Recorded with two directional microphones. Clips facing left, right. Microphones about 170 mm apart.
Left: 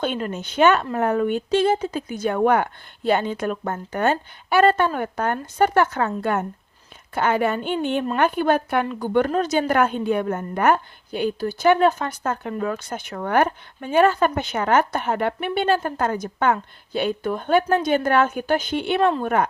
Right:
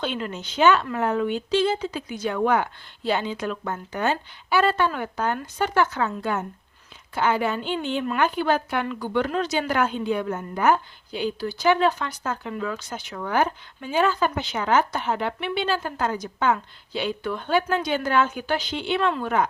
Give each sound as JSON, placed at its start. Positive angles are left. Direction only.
{"t": 0.0, "sound": "a woman's voice", "side_deg": 50}